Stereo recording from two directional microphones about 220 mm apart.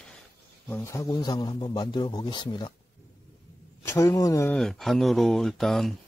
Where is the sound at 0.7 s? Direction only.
15° left (ahead or behind).